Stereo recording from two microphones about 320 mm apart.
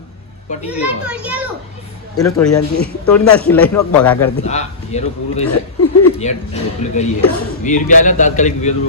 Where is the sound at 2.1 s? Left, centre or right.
Centre.